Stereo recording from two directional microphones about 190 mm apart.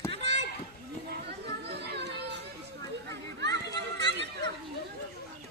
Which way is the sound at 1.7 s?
60° right (ahead or behind).